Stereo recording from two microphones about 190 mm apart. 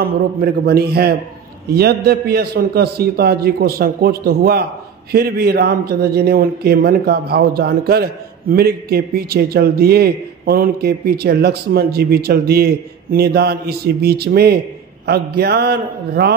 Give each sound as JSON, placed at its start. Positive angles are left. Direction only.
{"t": 0.0, "sound": "a man's voice", "side_deg": -55}